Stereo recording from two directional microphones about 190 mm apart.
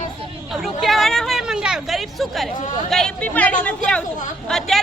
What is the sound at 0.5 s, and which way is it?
Speech, centre (ahead or behind).